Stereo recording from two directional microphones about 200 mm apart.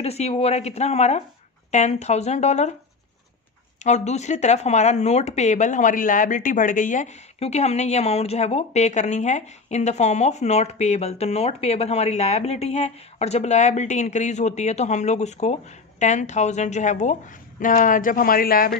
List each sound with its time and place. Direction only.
0.0 s speech: 30° left (ahead or behind)
3.8 s speech: 35° left (ahead or behind)